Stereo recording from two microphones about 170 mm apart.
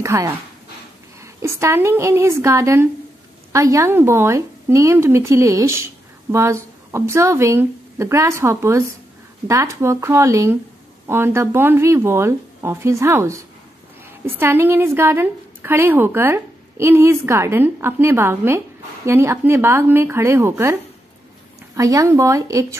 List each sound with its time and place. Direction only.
0.0 s a woman's voice: 20° right (ahead or behind)
21.7 s a woman's voice: 20° right (ahead or behind)